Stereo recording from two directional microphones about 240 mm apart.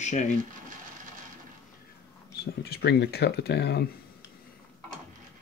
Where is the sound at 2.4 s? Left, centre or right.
Left.